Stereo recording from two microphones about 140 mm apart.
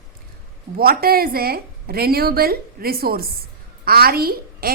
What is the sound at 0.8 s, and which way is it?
A woman's voice, 90° right.